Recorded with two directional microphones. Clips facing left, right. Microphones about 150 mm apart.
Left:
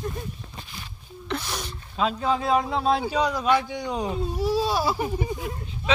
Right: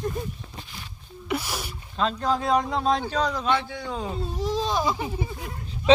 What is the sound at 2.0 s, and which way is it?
A man's voice, 5° left (ahead or behind).